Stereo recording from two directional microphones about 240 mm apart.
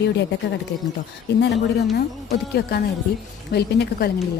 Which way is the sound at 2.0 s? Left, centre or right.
Left.